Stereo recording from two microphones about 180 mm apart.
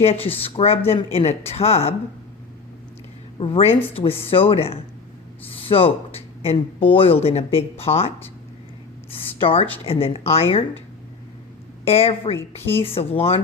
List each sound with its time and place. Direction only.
0.0 s speech: 35° left (ahead or behind)
3.3 s a woman's voice: 30° left (ahead or behind)
5.4 s a sound: 30° left (ahead or behind)
6.9 s speech: 30° left (ahead or behind)
11.9 s speech: 35° left (ahead or behind)